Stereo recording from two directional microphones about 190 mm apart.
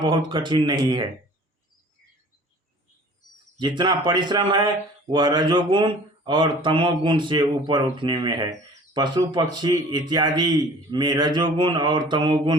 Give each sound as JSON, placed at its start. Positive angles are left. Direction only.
{"t": 0.0, "sound": "speech", "side_deg": -25}
{"t": 3.6, "sound": "speech", "side_deg": -25}